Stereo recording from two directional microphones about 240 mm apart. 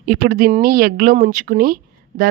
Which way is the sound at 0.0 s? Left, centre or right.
Right.